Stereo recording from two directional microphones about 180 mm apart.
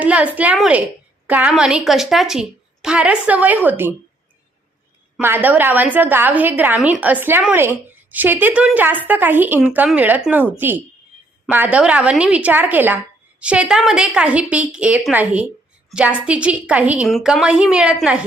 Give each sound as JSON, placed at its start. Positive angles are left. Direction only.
{"t": 0.0, "sound": "a woman's voice", "side_deg": -10}
{"t": 5.1, "sound": "a woman's voice", "side_deg": -10}